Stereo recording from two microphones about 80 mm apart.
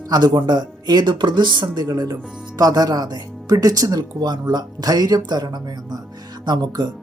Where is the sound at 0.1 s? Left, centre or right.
Right.